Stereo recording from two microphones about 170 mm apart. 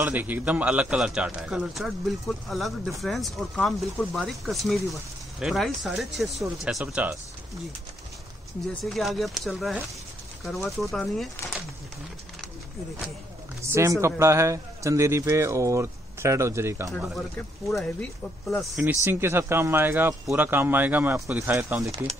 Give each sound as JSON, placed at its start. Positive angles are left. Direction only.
{"t": 0.0, "sound": "a man's voice", "side_deg": -10}
{"t": 8.8, "sound": "a man's voice", "side_deg": 0}
{"t": 13.7, "sound": "speech", "side_deg": -15}
{"t": 16.9, "sound": "a man's voice", "side_deg": 5}
{"t": 19.0, "sound": "speech", "side_deg": -15}